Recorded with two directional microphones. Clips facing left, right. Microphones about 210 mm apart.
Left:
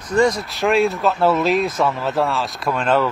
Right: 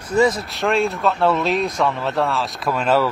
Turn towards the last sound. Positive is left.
turn(degrees=-5)  # may be behind; listen again after turning